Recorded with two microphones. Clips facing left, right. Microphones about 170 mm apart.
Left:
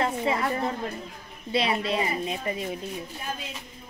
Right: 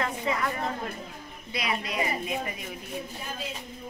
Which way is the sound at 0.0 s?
30° left (ahead or behind).